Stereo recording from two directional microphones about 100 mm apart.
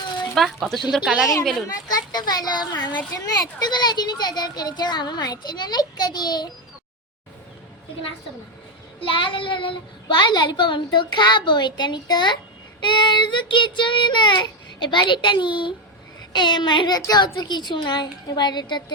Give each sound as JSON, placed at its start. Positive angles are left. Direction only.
{"t": 0.3, "sound": "speech", "side_deg": 0}
{"t": 1.6, "sound": "a child's voice", "side_deg": 40}
{"t": 9.0, "sound": "a child's voice", "side_deg": 60}